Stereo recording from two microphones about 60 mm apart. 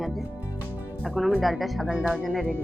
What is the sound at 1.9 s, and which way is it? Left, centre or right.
Speech, right.